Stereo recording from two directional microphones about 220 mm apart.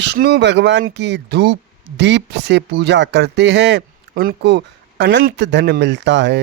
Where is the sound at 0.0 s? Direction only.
50° right (ahead or behind).